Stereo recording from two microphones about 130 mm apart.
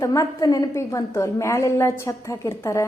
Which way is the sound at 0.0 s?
25° left (ahead or behind).